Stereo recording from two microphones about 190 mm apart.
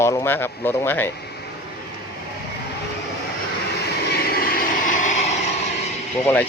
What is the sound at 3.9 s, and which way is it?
Vehicle, 55° left (ahead or behind).